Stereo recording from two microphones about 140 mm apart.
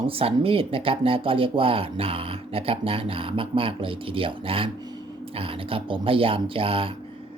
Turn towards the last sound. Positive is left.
turn(degrees=-40)  # may be behind; listen again after turning